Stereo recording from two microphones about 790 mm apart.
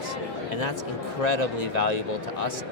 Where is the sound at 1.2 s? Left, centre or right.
Left.